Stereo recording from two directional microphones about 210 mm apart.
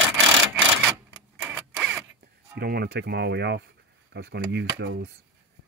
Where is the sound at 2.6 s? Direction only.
50° right (ahead or behind).